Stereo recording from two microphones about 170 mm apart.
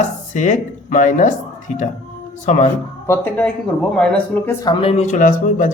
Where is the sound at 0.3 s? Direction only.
45° left (ahead or behind).